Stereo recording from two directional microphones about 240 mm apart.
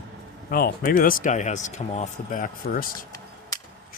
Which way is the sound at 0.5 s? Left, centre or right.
Left.